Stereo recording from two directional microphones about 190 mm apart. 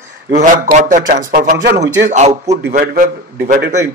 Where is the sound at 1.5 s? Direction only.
65° right (ahead or behind).